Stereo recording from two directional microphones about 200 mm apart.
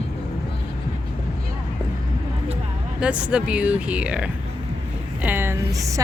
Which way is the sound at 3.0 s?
5° right (ahead or behind).